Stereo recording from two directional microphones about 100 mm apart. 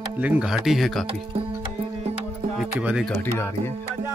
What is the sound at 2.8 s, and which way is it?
Speech, 10° right (ahead or behind).